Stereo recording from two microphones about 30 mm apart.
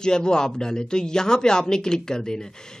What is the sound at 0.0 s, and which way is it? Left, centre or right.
A woman's voice, left.